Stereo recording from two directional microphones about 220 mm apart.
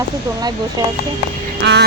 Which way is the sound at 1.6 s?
50° right (ahead or behind).